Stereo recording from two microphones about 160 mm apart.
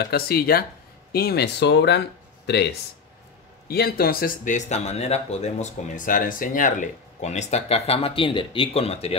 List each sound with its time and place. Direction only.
0.0 s speech: 75° left (ahead or behind)
1.1 s speech: 80° left
3.6 s speech: 75° left (ahead or behind); by 9.1 s 40° left (ahead or behind)